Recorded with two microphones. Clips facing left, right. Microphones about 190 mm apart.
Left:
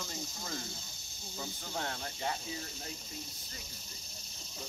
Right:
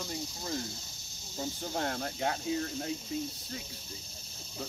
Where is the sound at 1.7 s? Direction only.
50° right (ahead or behind); by 2.9 s 65° right (ahead or behind).